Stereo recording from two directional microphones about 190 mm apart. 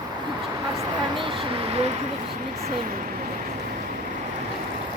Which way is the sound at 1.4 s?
30° right (ahead or behind).